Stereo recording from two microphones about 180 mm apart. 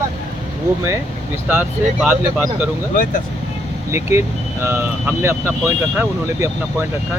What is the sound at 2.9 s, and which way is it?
Speech, 50° left (ahead or behind).